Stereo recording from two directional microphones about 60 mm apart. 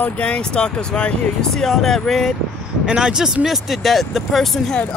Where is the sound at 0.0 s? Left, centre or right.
Centre.